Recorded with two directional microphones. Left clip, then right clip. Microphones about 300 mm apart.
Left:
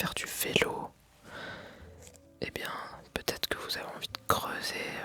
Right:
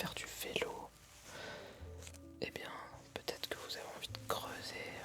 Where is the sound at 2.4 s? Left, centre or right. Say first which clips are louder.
Left 8 dB; left.